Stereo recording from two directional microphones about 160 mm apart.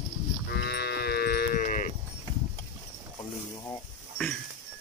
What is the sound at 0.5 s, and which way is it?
Livestock, 90° left.